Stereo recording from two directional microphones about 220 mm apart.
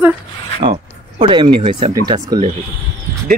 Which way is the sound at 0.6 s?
25° right (ahead or behind).